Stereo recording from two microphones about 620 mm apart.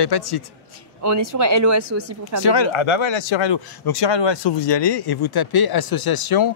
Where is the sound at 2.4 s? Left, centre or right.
Left.